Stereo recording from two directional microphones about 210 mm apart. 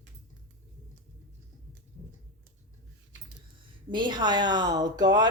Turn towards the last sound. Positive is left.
turn(degrees=-20)  # may be behind; listen again after turning